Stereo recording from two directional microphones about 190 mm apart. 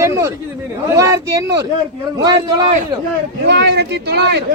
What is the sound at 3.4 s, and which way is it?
Speech, 60° right (ahead or behind).